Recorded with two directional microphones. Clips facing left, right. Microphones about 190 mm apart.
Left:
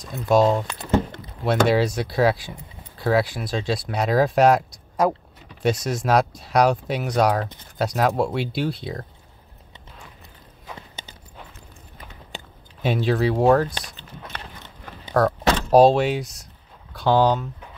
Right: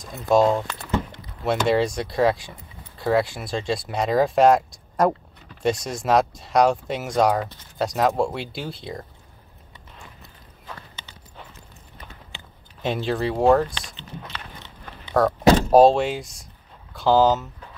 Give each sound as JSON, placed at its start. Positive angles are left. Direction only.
{"t": 0.0, "sound": "speech", "side_deg": 0}
{"t": 1.7, "sound": "speech", "side_deg": 5}
{"t": 12.8, "sound": "speech", "side_deg": 0}
{"t": 13.9, "sound": "a sound", "side_deg": 50}
{"t": 15.2, "sound": "speech", "side_deg": 0}